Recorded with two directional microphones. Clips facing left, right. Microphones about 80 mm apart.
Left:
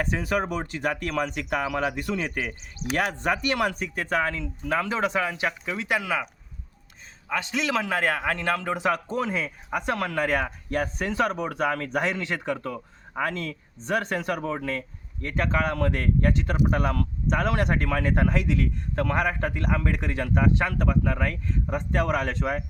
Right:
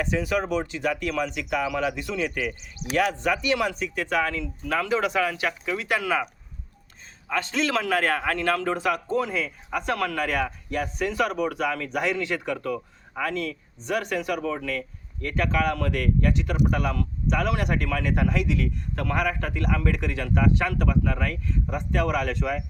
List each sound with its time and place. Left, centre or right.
0.0 s speech: left; by 6.1 s centre
7.3 s a man's voice: centre; by 22.6 s left